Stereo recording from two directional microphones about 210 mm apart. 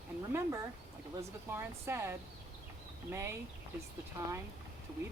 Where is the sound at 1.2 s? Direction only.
15° right (ahead or behind).